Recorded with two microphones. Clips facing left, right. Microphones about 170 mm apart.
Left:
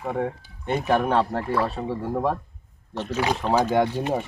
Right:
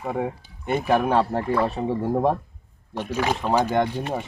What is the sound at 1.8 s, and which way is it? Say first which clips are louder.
Speech: right 4 dB; 20° right (ahead or behind).